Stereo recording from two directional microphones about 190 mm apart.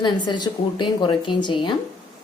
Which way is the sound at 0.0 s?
20° left (ahead or behind).